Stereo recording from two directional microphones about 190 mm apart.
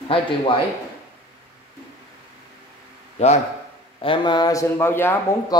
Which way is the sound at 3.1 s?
35° left (ahead or behind).